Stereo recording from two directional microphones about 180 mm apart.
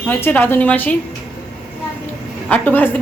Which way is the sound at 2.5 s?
10° left (ahead or behind).